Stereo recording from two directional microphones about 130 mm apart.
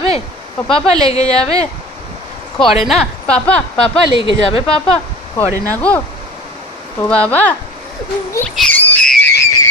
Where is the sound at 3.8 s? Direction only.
45° left (ahead or behind).